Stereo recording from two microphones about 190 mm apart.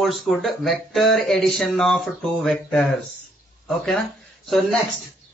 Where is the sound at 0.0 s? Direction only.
Centre (ahead or behind).